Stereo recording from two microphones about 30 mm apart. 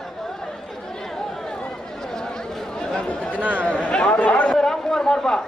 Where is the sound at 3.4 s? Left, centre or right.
Right.